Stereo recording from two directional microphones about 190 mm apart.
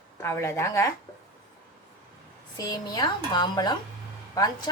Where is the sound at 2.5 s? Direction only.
20° left (ahead or behind).